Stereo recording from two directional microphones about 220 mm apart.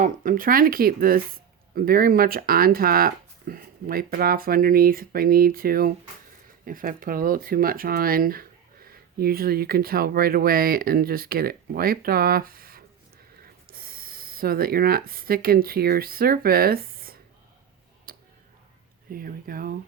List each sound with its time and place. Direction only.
0.0 s speech: 35° right (ahead or behind)
18.1 s a sound: 40° right (ahead or behind)
19.1 s speech: 40° right (ahead or behind)